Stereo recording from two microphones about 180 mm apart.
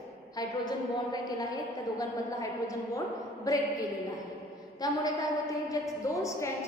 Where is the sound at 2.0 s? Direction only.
20° left (ahead or behind).